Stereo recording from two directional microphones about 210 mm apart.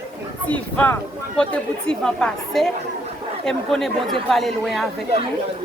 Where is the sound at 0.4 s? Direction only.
5° left (ahead or behind).